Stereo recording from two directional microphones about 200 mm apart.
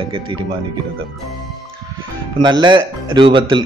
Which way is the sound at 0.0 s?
25° right (ahead or behind).